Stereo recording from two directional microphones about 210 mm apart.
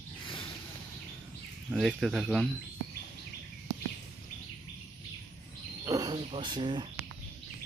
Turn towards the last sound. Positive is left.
turn(degrees=-20)  # may be behind; listen again after turning